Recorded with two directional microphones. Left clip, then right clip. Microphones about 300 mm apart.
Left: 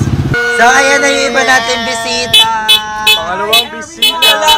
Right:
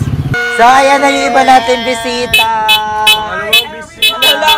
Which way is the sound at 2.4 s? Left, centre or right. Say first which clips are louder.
Left 1 dB; right.